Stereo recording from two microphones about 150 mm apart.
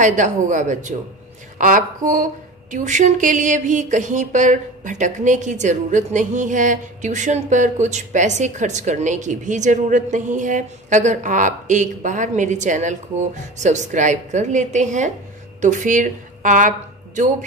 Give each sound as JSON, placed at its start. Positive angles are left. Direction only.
{"t": 0.0, "sound": "a woman's voice", "side_deg": -55}